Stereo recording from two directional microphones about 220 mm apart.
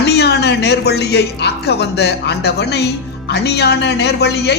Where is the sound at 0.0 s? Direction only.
50° left (ahead or behind).